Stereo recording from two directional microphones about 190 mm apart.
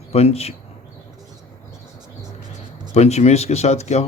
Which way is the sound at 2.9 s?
35° left (ahead or behind).